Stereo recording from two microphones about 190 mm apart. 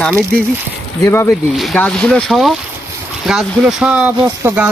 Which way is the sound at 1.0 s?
15° left (ahead or behind).